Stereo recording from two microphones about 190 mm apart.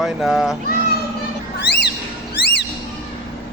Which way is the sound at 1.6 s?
65° left (ahead or behind).